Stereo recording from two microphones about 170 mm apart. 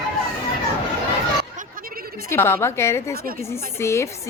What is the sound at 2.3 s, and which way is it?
Speech, 15° left (ahead or behind).